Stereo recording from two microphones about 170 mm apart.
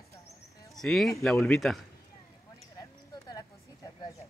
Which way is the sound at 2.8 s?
20° left (ahead or behind).